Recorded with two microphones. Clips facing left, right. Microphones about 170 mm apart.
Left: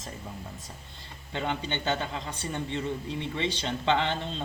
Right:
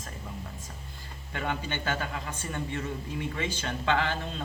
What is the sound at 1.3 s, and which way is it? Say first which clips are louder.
A man's voice: left 1 dB; 25° left (ahead or behind).